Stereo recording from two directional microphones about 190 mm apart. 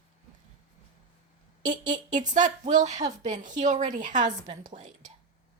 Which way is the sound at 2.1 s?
40° right (ahead or behind).